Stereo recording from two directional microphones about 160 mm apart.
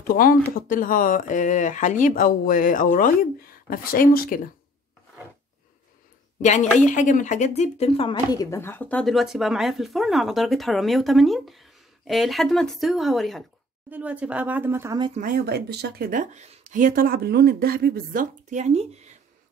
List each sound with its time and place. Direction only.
0.0 s speech: 60° left (ahead or behind)
6.4 s a woman's voice: 50° left (ahead or behind); by 15.0 s 15° right (ahead or behind)
15.1 s speech: 65° right (ahead or behind); by 19.1 s 40° right (ahead or behind)